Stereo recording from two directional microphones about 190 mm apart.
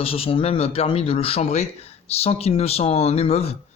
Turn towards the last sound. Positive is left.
turn(degrees=30)  # may be behind; listen again after turning